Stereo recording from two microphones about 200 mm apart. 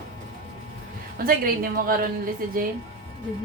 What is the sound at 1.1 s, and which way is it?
Speech, 45° right (ahead or behind).